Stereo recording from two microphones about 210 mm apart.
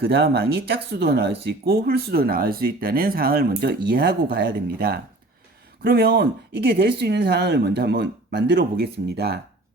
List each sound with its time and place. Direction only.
0.0 s speech: 50° right (ahead or behind)